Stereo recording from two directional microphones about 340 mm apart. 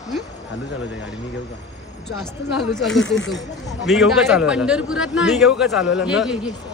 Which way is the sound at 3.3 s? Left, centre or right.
Centre.